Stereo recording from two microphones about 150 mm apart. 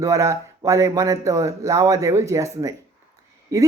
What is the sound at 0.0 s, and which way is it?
Speech, 20° right (ahead or behind).